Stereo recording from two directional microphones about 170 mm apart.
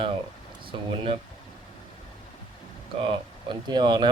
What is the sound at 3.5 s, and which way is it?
Speech, 25° right (ahead or behind).